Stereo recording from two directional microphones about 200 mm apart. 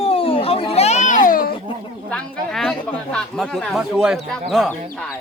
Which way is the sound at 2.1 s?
5° left (ahead or behind).